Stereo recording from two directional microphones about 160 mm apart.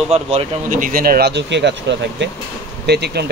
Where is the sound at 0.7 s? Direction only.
60° right (ahead or behind).